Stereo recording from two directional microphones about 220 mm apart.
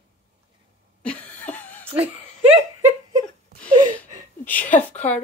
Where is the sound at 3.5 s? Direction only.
45° right (ahead or behind).